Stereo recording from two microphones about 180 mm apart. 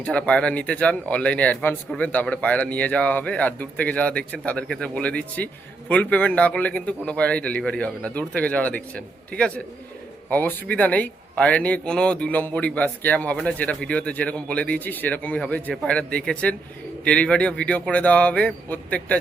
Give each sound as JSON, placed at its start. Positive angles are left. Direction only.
{"t": 0.0, "sound": "speech", "side_deg": 5}